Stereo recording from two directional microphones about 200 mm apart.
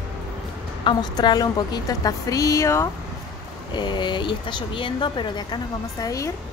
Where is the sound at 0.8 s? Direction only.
20° left (ahead or behind).